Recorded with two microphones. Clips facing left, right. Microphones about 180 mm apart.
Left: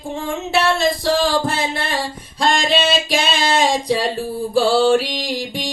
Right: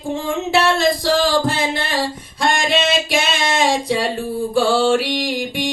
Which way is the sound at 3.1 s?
30° left (ahead or behind).